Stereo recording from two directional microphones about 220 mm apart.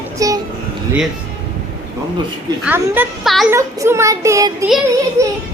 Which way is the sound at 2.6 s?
5° right (ahead or behind).